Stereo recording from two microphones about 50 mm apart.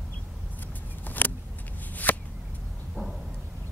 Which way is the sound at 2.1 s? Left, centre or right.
Left.